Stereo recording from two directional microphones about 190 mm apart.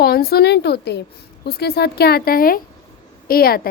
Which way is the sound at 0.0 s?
55° left (ahead or behind).